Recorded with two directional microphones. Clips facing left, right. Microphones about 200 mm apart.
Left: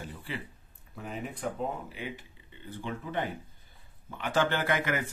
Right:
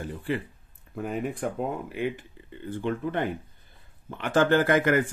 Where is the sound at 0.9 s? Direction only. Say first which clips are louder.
Right 8 dB; 50° right (ahead or behind).